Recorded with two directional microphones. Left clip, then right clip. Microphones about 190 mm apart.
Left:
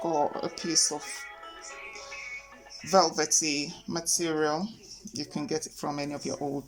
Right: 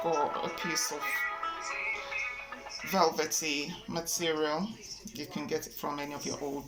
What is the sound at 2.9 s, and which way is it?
Speech, 60° left (ahead or behind).